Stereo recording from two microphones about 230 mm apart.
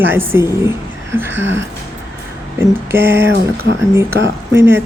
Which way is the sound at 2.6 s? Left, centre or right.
Centre.